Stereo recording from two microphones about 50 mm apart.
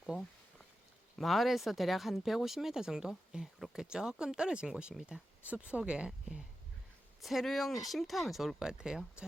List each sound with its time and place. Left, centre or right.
1.2 s speech: centre; by 6.1 s right
7.2 s speech: centre
8.5 s speech: centre